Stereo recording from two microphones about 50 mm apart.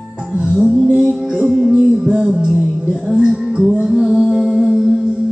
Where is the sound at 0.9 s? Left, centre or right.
Right.